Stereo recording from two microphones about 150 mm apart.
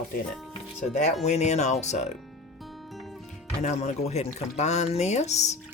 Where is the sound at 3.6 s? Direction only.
50° left (ahead or behind).